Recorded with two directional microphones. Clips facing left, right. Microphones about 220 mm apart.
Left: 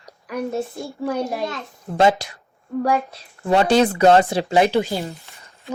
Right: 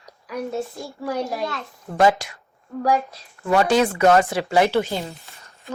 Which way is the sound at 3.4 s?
30° left (ahead or behind).